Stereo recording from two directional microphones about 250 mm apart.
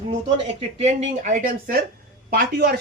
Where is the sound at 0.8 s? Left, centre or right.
Right.